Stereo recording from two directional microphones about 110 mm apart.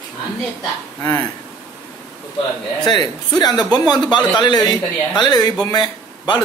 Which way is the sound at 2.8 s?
40° left (ahead or behind).